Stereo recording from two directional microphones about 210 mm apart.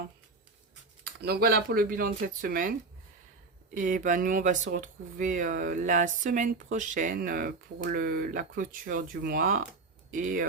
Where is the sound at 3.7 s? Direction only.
40° right (ahead or behind).